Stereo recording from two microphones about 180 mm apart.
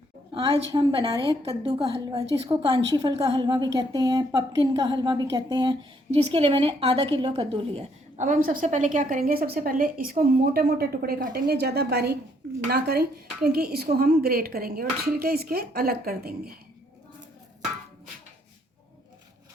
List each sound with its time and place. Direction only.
0.3 s a woman's voice: 30° right (ahead or behind); by 16.3 s 55° right (ahead or behind)